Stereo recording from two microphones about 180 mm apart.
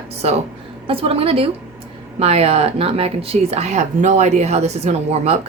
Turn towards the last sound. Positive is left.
turn(degrees=-35)  # may be behind; listen again after turning